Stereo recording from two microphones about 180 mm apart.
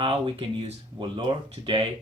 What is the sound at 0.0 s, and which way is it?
Speech, 30° right (ahead or behind).